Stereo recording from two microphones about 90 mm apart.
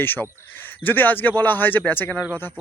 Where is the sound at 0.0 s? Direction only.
20° left (ahead or behind).